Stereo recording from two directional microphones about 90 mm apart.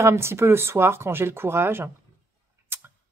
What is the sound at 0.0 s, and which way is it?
Speech, 30° right (ahead or behind).